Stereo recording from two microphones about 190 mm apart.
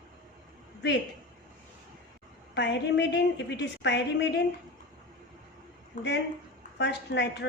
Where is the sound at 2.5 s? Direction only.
65° left (ahead or behind).